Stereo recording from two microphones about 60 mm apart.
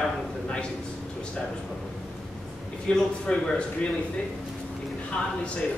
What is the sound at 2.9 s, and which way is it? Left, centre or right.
Speech, centre.